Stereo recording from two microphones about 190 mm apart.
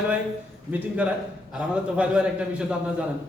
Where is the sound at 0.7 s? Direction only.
5° right (ahead or behind).